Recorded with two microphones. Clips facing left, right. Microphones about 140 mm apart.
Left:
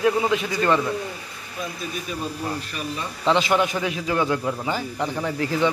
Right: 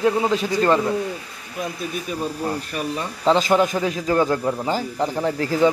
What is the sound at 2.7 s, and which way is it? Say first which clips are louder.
A man's voice: right 4 dB; 40° right (ahead or behind).